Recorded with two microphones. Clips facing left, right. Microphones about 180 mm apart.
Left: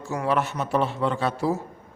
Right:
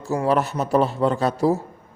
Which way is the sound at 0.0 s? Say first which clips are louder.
Right 4 dB; 35° right (ahead or behind).